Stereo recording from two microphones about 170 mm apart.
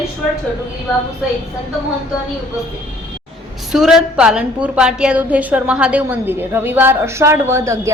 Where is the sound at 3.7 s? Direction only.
5° right (ahead or behind).